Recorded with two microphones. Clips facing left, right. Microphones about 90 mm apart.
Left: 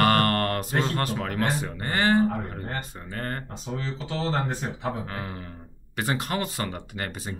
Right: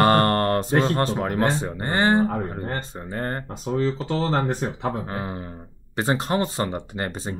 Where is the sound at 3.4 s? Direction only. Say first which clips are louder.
Right 9 dB; 50° right (ahead or behind).